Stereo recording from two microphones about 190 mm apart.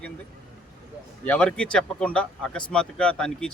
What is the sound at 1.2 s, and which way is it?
Speech, 5° left (ahead or behind).